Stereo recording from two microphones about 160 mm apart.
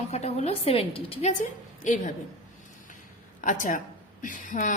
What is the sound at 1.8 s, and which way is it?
Speech, 55° left (ahead or behind).